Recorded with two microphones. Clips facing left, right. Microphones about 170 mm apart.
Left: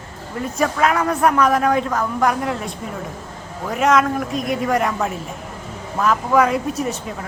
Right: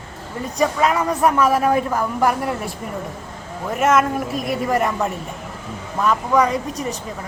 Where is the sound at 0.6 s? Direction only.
Centre (ahead or behind).